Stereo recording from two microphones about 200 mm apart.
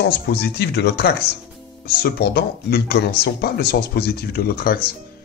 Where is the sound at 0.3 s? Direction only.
55° left (ahead or behind).